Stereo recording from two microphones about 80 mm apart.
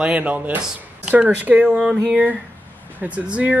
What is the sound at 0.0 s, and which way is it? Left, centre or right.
Speech, centre.